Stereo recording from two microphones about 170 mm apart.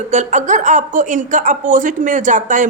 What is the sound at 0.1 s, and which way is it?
Speech, 45° right (ahead or behind).